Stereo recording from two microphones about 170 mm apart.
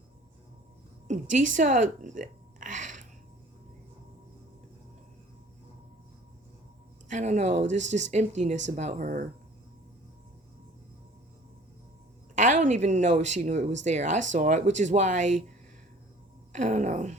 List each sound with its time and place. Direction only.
1.0 s a sound: 45° right (ahead or behind)
7.1 s speech: 45° right (ahead or behind)
12.4 s speech: 50° right (ahead or behind)
16.5 s speech: 45° right (ahead or behind)